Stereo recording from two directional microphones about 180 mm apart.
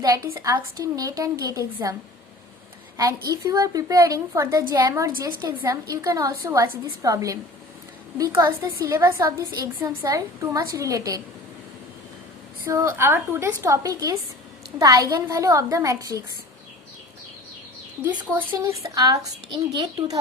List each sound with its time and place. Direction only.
0.3 s a woman's voice: 15° right (ahead or behind)
3.2 s a woman's voice: 20° right (ahead or behind)
12.6 s a woman's voice: 15° right (ahead or behind)
18.0 s a woman's voice: 15° right (ahead or behind)